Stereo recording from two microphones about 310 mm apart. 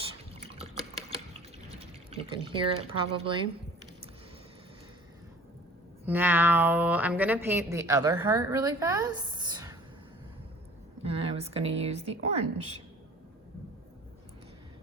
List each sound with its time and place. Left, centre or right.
0.5 s water: centre
2.0 s a woman's voice: centre
6.1 s a woman's voice: centre
11.0 s a sound: centre
11.8 s speech: centre